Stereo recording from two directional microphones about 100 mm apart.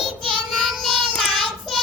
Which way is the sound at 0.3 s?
Centre (ahead or behind).